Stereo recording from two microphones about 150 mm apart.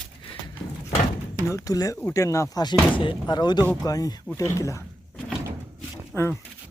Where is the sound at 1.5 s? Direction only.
20° left (ahead or behind).